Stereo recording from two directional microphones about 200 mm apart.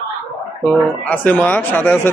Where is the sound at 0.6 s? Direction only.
5° left (ahead or behind).